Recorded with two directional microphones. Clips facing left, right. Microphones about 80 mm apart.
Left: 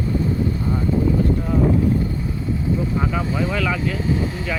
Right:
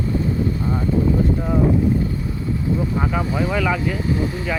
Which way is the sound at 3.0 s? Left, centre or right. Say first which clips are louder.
Right 1 dB; centre.